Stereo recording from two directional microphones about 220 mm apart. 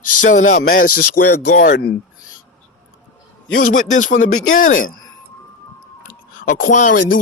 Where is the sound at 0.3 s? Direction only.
35° left (ahead or behind).